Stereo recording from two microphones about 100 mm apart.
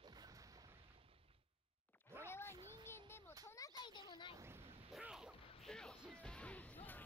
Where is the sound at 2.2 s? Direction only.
25° left (ahead or behind).